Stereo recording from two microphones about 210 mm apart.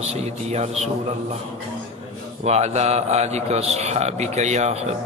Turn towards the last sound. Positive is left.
turn(degrees=-30)  # may be behind; listen again after turning